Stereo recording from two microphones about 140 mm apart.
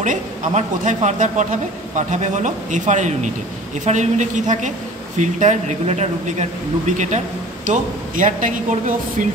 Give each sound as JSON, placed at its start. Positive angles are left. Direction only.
{"t": 0.0, "sound": "a man's voice", "side_deg": -65}